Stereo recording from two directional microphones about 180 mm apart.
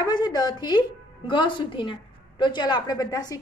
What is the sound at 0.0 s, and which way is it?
A woman's voice, 20° left (ahead or behind).